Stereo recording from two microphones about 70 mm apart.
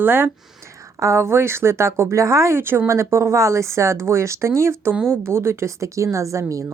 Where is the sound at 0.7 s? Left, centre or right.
Right.